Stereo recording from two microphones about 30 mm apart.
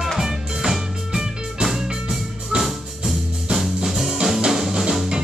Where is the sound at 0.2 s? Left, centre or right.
Centre.